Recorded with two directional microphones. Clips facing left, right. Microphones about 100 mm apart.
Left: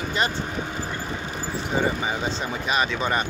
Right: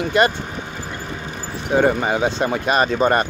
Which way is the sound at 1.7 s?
60° right (ahead or behind).